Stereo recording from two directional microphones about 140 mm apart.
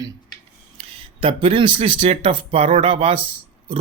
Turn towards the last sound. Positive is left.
turn(degrees=-45)  # may be behind; listen again after turning